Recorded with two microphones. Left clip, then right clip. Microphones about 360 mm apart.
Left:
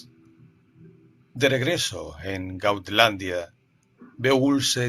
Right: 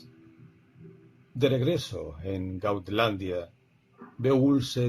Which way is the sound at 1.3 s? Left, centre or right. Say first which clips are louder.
Left 4 dB; left.